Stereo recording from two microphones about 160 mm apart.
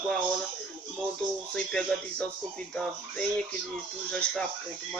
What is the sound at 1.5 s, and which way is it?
Speech, 5° left (ahead or behind).